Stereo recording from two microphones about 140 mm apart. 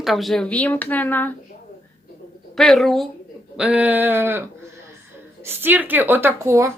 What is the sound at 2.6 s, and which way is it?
Speech, centre (ahead or behind).